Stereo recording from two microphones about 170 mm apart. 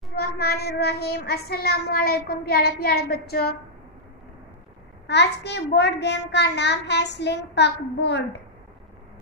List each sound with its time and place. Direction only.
0.1 s child singing: 65° left (ahead or behind)
5.0 s a child's voice: 85° left